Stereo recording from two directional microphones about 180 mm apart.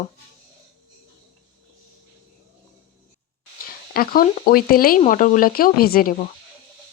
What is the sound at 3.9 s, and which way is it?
Speech, 55° left (ahead or behind).